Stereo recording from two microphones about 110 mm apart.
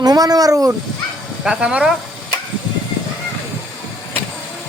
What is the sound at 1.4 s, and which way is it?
Speech, 10° right (ahead or behind).